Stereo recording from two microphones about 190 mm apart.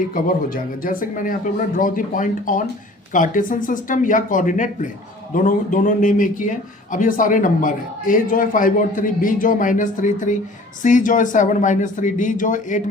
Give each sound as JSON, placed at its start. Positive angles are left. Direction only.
{"t": 0.1, "sound": "a man's voice", "side_deg": 50}